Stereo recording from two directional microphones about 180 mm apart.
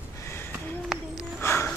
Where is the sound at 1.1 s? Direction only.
15° left (ahead or behind).